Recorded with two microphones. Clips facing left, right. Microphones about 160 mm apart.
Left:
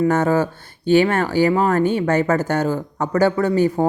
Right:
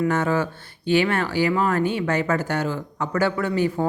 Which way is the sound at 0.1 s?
40° left (ahead or behind).